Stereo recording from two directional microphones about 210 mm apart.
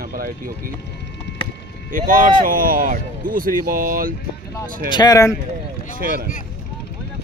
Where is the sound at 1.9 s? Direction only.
40° right (ahead or behind).